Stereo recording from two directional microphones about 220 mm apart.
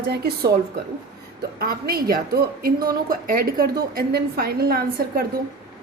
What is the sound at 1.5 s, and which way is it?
A woman's voice, 40° right (ahead or behind).